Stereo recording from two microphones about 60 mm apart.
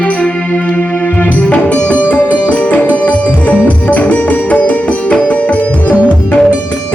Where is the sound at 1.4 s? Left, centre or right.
Left.